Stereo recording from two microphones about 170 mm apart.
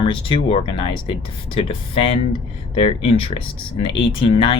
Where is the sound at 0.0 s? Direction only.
30° left (ahead or behind).